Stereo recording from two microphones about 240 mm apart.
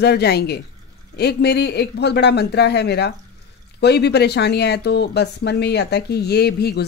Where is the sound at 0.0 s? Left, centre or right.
Left.